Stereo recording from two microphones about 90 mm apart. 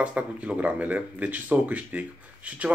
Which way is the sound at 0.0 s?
15° right (ahead or behind).